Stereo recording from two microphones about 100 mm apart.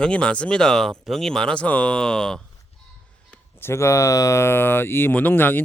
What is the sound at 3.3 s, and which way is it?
Speech, 25° left (ahead or behind).